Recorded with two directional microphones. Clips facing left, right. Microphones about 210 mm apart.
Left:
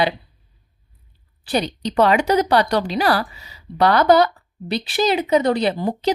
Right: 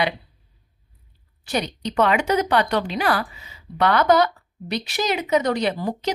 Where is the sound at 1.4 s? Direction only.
30° left (ahead or behind).